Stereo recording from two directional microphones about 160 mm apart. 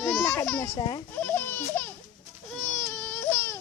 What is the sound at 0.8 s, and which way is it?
Speech, 30° left (ahead or behind).